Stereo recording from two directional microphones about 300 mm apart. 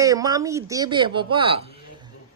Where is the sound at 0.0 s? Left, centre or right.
Centre.